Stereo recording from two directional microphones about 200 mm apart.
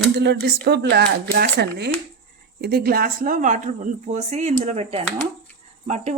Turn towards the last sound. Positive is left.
turn(degrees=-35)  # may be behind; listen again after turning